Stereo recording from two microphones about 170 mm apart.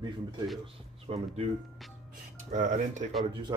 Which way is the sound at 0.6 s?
35° right (ahead or behind).